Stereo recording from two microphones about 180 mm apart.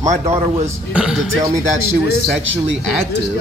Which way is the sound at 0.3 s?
35° right (ahead or behind).